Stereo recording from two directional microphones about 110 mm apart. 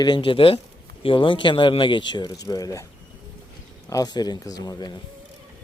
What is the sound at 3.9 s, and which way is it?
Speech, 35° left (ahead or behind).